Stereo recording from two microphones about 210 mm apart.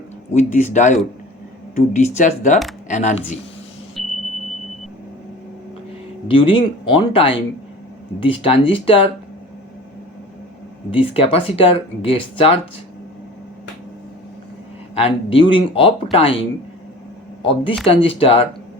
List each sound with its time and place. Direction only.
0.3 s speech: 35° left (ahead or behind)
4.0 s smoke detector: centre (ahead or behind)
6.2 s speech: 25° left (ahead or behind)
10.9 s speech: 25° left (ahead or behind)
14.9 s speech: 25° left (ahead or behind)